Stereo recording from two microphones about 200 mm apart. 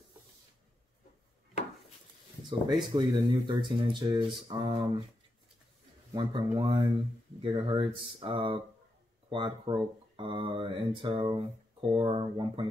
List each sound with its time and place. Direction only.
2.9 s speech: 25° right (ahead or behind)
6.1 s speech: 25° right (ahead or behind)